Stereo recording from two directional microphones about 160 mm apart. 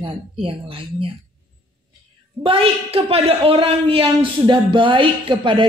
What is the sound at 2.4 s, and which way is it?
A woman's voice, 35° right (ahead or behind).